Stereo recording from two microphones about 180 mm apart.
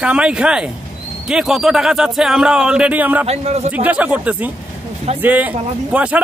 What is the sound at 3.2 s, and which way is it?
Speech, 35° right (ahead or behind).